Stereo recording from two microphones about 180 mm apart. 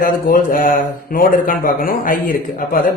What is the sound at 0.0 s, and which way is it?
Speech, 50° left (ahead or behind).